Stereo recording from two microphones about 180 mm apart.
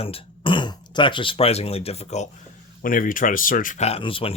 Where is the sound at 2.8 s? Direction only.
50° left (ahead or behind); by 4.3 s 30° left (ahead or behind).